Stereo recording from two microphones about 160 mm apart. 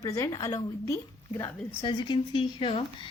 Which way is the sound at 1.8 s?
25° left (ahead or behind).